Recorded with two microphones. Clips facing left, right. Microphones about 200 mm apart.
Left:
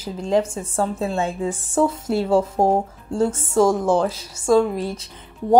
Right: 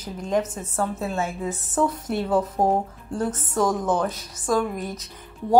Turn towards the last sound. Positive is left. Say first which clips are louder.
# left 5 dB
turn(degrees=30)  # may be behind; listen again after turning